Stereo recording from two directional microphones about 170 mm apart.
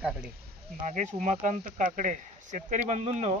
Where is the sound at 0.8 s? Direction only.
45° right (ahead or behind).